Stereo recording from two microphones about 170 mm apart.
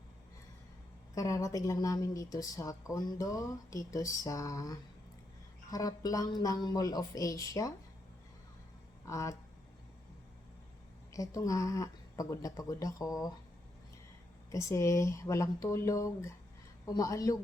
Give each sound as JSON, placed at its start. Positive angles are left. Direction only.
{"t": 1.1, "sound": "a woman's voice", "side_deg": 20}
{"t": 9.0, "sound": "a woman's voice", "side_deg": 20}
{"t": 11.1, "sound": "a woman's voice", "side_deg": 20}
{"t": 14.5, "sound": "a woman's voice", "side_deg": 20}